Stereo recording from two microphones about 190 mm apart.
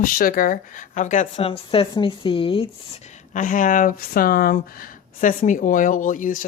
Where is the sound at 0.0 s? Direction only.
50° left (ahead or behind).